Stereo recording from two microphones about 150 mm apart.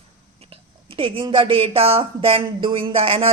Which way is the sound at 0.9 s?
35° right (ahead or behind).